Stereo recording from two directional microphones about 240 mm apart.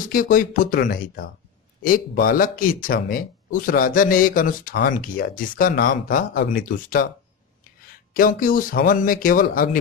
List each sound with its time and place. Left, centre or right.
0.0 s speech: left
8.1 s speech: left